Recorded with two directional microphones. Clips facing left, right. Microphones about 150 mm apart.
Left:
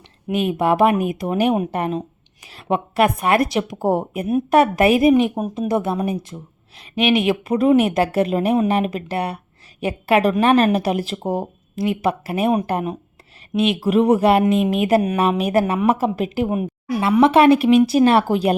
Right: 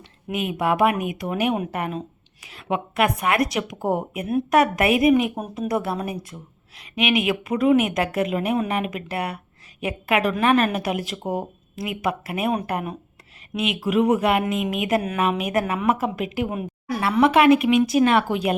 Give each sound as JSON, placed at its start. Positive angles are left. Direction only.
{"t": 0.3, "sound": "a woman's voice", "side_deg": 30}
{"t": 4.3, "sound": "a woman's voice", "side_deg": 20}
{"t": 17.0, "sound": "a woman's voice", "side_deg": 20}